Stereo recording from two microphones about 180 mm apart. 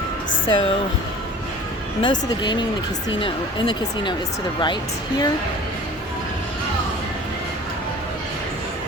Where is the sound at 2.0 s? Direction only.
25° left (ahead or behind).